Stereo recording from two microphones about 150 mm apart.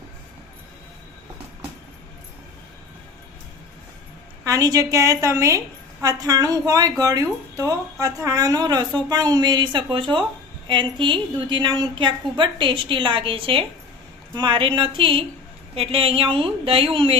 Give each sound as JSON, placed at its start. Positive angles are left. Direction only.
{"t": 4.4, "sound": "a woman's voice", "side_deg": -20}